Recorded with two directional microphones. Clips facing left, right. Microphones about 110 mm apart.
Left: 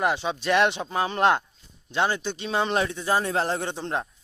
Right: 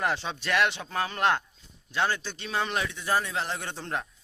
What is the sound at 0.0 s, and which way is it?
Speech, 15° left (ahead or behind).